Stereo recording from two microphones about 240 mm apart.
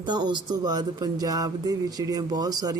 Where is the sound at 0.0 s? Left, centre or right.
Centre.